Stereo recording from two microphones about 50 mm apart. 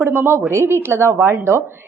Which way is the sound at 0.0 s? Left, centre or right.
Right.